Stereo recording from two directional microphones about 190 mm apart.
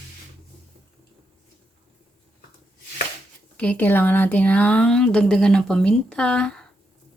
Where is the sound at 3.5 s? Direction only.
5° left (ahead or behind).